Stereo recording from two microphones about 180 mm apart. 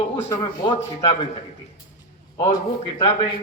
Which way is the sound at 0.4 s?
30° left (ahead or behind).